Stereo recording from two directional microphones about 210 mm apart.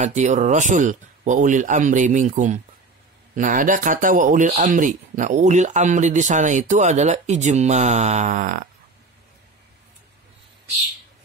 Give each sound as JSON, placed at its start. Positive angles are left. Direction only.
{"t": 0.0, "sound": "speech", "side_deg": -35}